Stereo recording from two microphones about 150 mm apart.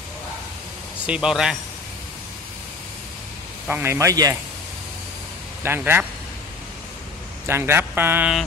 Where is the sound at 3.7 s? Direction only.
15° right (ahead or behind).